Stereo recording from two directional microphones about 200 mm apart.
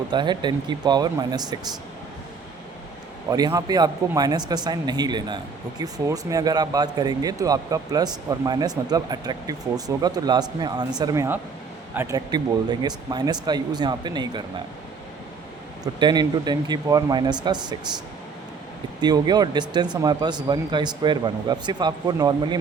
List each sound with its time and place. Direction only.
0.1 s speech: 20° right (ahead or behind)
3.2 s speech: 15° right (ahead or behind)
15.8 s speech: 20° right (ahead or behind)
19.0 s speech: 20° right (ahead or behind)